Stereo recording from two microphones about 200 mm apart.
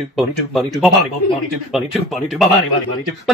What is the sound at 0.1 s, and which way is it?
Speech, centre (ahead or behind).